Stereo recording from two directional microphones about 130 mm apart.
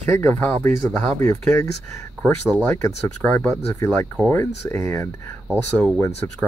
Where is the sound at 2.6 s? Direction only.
15° left (ahead or behind).